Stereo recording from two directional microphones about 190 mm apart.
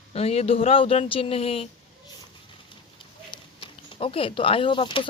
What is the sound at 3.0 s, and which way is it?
A woman's voice, 25° left (ahead or behind).